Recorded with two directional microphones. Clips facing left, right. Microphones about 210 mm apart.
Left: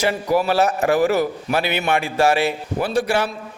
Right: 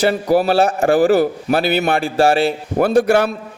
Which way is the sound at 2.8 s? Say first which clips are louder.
Right 7 dB; 45° right (ahead or behind).